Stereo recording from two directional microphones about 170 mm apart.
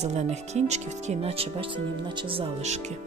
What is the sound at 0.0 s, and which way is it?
Speech, 40° right (ahead or behind).